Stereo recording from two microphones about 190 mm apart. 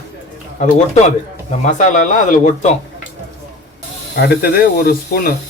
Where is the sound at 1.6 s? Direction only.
40° left (ahead or behind).